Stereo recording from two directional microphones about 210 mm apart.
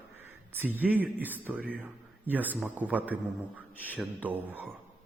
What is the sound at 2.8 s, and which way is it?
A man's voice, 5° right (ahead or behind).